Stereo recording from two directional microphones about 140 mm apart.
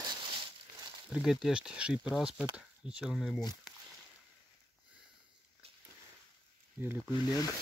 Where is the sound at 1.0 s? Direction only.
5° right (ahead or behind).